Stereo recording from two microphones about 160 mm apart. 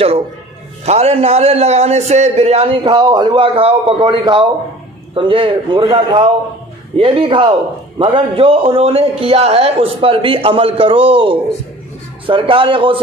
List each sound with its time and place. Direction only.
0.8 s a man's voice: 40° right (ahead or behind)